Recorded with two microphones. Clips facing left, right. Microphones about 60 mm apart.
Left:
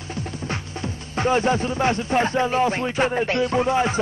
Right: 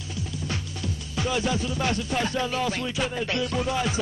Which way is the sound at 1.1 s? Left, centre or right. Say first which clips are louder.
Left 7 dB; left.